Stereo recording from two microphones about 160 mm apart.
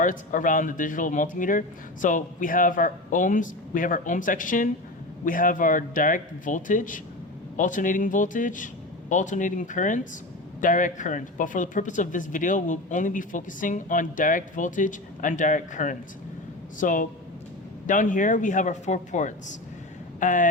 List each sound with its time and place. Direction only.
0.0 s speech: 55° left (ahead or behind)